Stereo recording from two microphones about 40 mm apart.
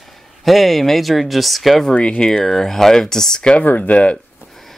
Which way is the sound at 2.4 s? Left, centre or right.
Centre.